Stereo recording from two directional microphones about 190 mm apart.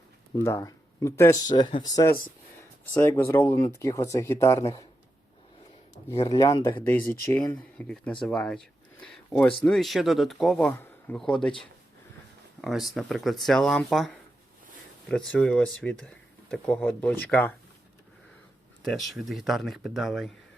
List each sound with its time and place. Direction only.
0.4 s speech: 15° left (ahead or behind)
6.2 s speech: 20° left (ahead or behind); by 14.1 s centre (ahead or behind)
15.1 s speech: 5° left (ahead or behind)
18.8 s speech: centre (ahead or behind)